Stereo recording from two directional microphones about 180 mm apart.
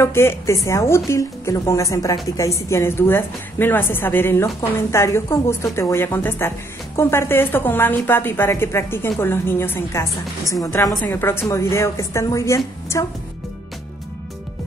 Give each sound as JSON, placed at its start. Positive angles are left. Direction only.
{"t": 0.0, "sound": "a woman's voice", "side_deg": 15}